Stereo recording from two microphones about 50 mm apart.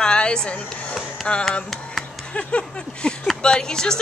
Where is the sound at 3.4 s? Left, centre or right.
Centre.